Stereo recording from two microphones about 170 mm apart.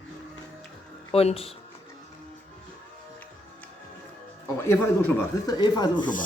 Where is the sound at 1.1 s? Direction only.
35° left (ahead or behind).